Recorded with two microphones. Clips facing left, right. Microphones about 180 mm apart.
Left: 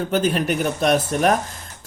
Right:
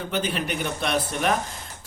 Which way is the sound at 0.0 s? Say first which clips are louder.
Left 7 dB; 45° left (ahead or behind).